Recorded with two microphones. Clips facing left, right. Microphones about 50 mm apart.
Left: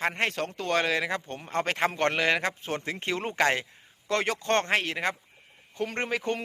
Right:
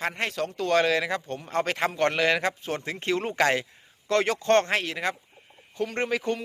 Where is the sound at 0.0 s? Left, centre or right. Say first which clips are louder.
Left 1 dB; left.